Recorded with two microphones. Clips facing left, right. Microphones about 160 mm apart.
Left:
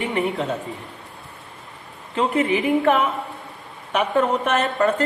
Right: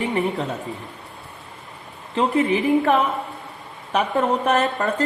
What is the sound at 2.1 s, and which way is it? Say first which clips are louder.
A woman's voice: right 1 dB; 40° right (ahead or behind).